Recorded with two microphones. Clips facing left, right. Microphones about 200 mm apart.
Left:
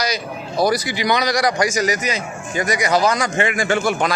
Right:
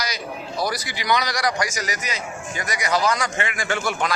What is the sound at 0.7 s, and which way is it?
A man's voice, 20° left (ahead or behind).